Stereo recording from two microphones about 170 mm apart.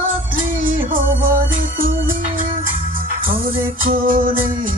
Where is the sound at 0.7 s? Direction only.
50° right (ahead or behind).